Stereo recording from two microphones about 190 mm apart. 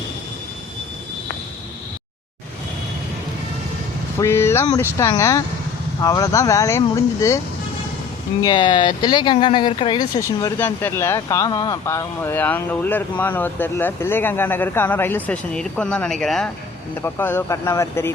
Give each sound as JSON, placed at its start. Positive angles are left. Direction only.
{"t": 4.2, "sound": "speech", "side_deg": 15}
{"t": 8.4, "sound": "speech", "side_deg": 25}